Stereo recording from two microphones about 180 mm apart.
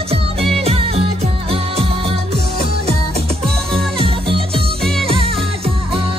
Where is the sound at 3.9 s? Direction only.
30° right (ahead or behind).